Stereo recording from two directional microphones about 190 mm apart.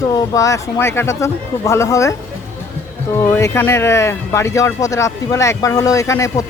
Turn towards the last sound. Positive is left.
turn(degrees=15)  # may be behind; listen again after turning